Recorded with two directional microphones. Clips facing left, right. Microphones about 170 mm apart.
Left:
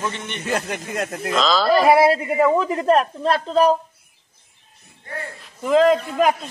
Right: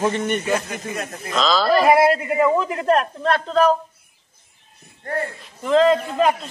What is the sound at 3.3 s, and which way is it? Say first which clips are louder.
Speech: even; 5° left (ahead or behind).